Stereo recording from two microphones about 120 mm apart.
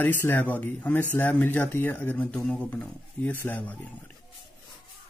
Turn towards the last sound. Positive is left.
turn(degrees=15)  # may be behind; listen again after turning